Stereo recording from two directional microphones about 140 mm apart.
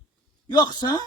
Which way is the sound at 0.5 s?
30° left (ahead or behind).